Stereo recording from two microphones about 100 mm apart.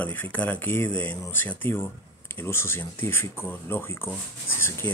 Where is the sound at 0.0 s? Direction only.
20° left (ahead or behind).